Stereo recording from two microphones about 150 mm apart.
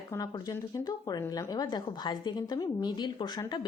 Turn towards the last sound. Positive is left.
turn(degrees=30)  # may be behind; listen again after turning